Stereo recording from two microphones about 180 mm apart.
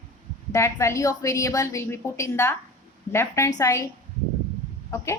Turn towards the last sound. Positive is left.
turn(degrees=20)  # may be behind; listen again after turning